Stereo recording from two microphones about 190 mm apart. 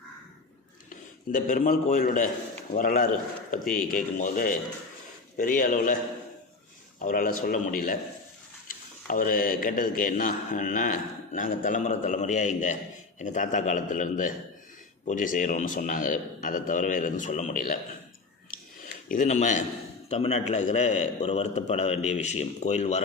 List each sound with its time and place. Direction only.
0.9 s a man's voice: 45° left (ahead or behind)
7.0 s a man's voice: 45° left (ahead or behind)
19.0 s a man's voice: 45° left (ahead or behind)